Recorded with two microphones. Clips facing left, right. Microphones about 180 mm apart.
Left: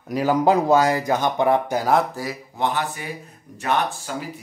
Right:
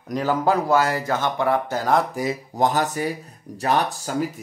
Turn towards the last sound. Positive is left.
turn(degrees=-35)  # may be behind; listen again after turning